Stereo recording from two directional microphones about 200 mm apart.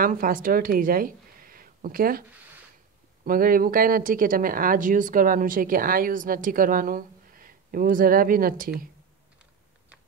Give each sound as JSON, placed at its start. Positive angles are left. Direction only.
{"t": 0.0, "sound": "speech", "side_deg": -45}
{"t": 3.3, "sound": "speech", "side_deg": -45}